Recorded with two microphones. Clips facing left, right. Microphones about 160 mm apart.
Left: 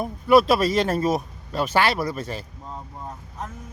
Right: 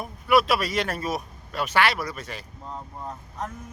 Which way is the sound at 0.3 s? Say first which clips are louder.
Left 5 dB; 30° left (ahead or behind).